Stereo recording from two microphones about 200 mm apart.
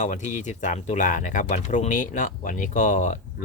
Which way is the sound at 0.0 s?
40° left (ahead or behind).